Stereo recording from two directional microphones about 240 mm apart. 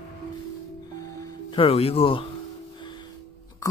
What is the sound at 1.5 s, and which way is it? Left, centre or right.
Speech, left.